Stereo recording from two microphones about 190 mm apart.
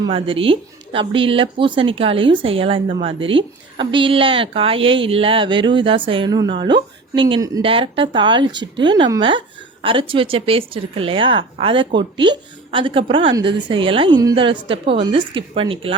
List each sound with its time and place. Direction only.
0.0 s speech: 30° right (ahead or behind)